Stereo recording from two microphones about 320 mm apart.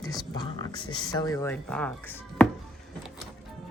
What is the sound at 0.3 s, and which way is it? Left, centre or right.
Speech, centre.